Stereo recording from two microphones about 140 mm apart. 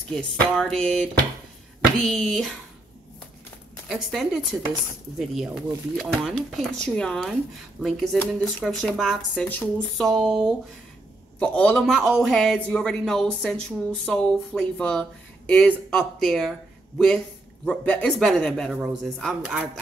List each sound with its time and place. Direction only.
0.1 s speech: 5° left (ahead or behind)
3.9 s speech: centre (ahead or behind)
8.2 s speech: 15° left (ahead or behind)
8.6 s speech: centre (ahead or behind)
11.3 s speech: 10° left (ahead or behind)
17.6 s speech: 10° left (ahead or behind)